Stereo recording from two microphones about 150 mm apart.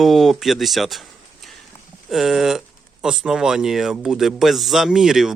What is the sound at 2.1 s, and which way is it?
Speech, centre (ahead or behind).